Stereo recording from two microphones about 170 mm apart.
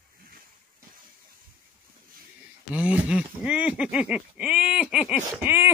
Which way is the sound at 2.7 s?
5° right (ahead or behind).